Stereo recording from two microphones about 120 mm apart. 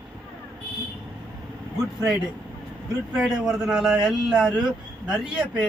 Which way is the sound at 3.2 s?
5° right (ahead or behind).